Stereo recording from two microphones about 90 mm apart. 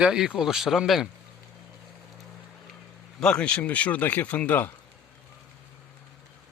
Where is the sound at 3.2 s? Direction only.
10° left (ahead or behind).